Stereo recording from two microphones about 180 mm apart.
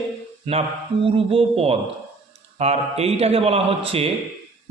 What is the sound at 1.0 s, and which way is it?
A man's voice, 30° right (ahead or behind).